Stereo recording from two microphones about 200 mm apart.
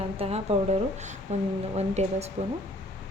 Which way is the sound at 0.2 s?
30° right (ahead or behind).